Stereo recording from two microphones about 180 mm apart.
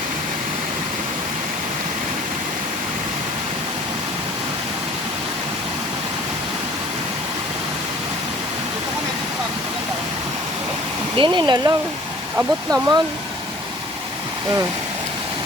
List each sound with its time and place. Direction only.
11.2 s speech: 25° right (ahead or behind)